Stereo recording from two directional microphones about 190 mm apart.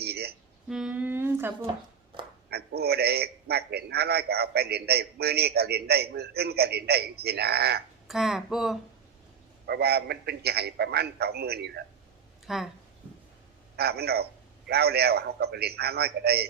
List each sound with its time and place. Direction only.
0.0 s music: 55° right (ahead or behind)
0.7 s a sound: 5° right (ahead or behind)
2.5 s a man's voice: 55° right (ahead or behind)
8.0 s speech: centre (ahead or behind)
9.6 s a man's voice: 60° right (ahead or behind)
12.5 s speech: centre (ahead or behind)
13.7 s a man's voice: 55° right (ahead or behind)